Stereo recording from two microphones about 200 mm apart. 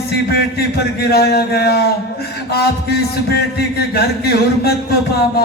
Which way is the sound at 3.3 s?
50° left (ahead or behind).